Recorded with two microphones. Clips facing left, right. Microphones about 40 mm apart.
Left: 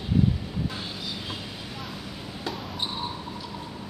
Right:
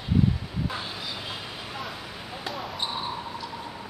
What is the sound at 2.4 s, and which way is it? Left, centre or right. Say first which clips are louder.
Basketball bounce: even; centre.